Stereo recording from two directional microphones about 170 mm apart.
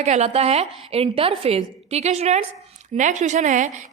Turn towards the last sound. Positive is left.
turn(degrees=-45)  # may be behind; listen again after turning